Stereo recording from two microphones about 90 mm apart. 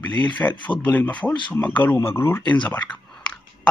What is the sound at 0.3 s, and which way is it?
Speech, 15° left (ahead or behind).